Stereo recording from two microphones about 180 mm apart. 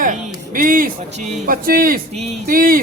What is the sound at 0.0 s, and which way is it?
Speech, 50° right (ahead or behind).